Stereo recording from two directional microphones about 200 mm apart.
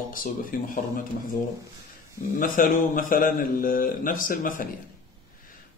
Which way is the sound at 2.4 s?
45° left (ahead or behind).